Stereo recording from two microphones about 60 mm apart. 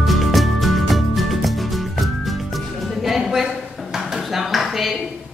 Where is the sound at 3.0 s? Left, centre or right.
Centre.